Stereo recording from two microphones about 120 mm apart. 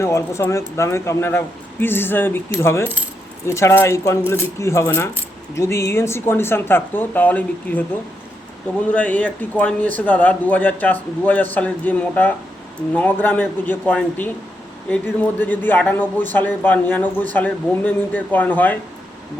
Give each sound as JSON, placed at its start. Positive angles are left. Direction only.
{"t": 0.0, "sound": "speech", "side_deg": 25}
{"t": 8.9, "sound": "speech", "side_deg": 10}